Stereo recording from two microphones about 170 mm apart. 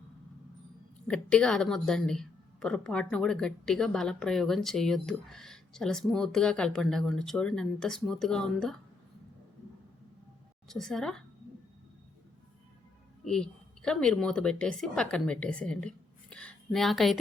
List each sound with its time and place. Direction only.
1.0 s a woman's voice: 5° left (ahead or behind)
10.7 s a woman's voice: centre (ahead or behind)
13.2 s a woman's voice: 5° left (ahead or behind)